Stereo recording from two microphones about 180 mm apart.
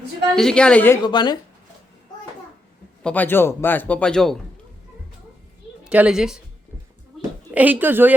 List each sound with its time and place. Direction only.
0.3 s a woman's voice: 5° left (ahead or behind)
1.0 s speech: 25° left (ahead or behind)
3.0 s a man's voice: 10° left (ahead or behind)
5.8 s a woman's voice: 5° right (ahead or behind)
7.5 s speech: 10° right (ahead or behind)